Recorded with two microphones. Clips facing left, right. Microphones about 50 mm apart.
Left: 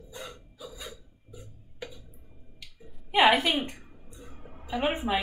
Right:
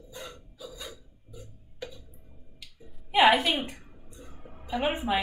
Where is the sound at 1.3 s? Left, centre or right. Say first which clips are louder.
Even; centre.